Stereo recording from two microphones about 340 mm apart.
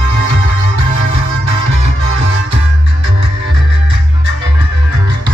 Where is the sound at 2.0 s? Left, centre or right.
Right.